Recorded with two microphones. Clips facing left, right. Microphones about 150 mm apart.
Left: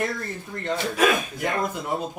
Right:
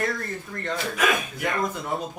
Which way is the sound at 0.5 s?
15° left (ahead or behind).